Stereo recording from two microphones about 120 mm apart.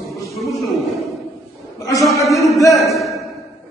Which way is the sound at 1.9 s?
Centre (ahead or behind).